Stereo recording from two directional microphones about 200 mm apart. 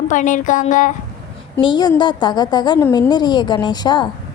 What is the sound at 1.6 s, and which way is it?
A woman's voice, 20° left (ahead or behind).